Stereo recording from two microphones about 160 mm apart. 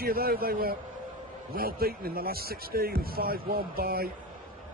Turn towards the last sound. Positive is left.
turn(degrees=-70)  # may be behind; listen again after turning